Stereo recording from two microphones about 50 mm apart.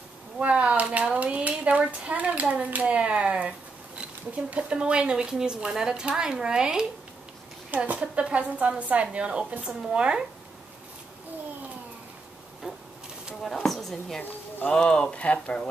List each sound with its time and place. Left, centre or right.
0.4 s speech: right
7.7 s speech: right
12.6 s printer: centre
13.7 s speech: centre
14.7 s speech: centre